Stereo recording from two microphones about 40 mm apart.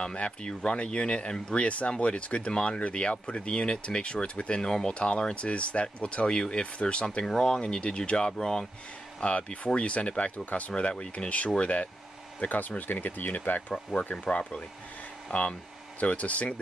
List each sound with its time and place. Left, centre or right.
0.0 s speech: left
4.6 s speech: centre
4.9 s speech: left
9.2 s speech: left
12.4 s speech: left
14.1 s speech: left